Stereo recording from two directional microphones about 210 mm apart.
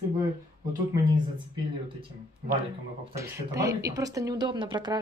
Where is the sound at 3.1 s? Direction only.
15° right (ahead or behind).